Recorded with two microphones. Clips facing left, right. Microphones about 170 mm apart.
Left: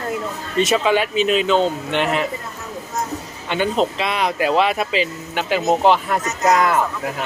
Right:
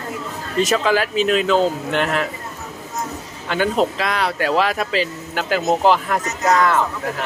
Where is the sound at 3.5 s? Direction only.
Centre (ahead or behind).